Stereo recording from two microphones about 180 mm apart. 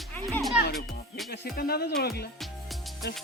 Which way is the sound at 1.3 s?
60° left (ahead or behind).